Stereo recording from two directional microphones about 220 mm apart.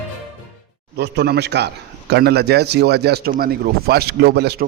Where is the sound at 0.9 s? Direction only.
50° right (ahead or behind).